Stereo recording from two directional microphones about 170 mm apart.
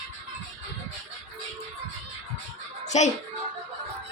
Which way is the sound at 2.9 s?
45° left (ahead or behind).